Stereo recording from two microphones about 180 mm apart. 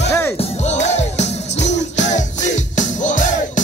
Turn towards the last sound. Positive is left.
turn(degrees=45)  # may be behind; listen again after turning